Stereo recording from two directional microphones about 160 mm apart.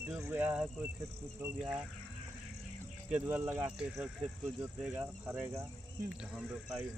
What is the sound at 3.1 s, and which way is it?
Speech, 10° right (ahead or behind).